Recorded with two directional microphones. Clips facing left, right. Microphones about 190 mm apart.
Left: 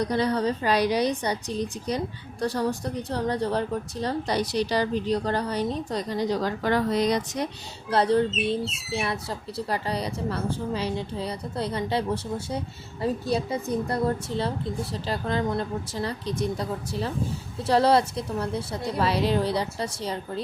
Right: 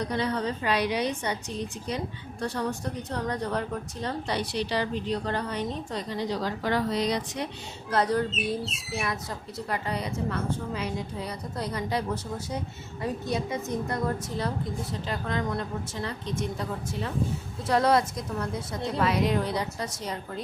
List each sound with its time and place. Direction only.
0.0 s a woman's voice: 35° left (ahead or behind)
7.9 s a woman's voice: 30° left (ahead or behind)